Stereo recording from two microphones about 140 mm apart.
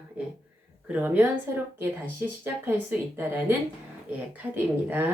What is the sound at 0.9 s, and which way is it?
Speech, 10° right (ahead or behind).